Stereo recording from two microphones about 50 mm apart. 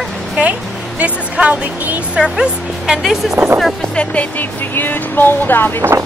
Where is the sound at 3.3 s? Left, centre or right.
Right.